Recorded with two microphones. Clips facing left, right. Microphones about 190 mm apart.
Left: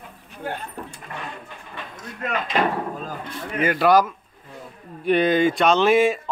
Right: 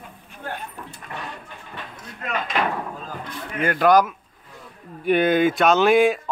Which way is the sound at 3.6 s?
5° left (ahead or behind).